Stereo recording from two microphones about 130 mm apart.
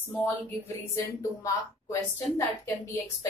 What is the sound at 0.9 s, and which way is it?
Speech, 25° left (ahead or behind).